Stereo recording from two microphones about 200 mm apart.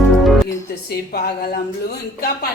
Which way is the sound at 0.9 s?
50° left (ahead or behind).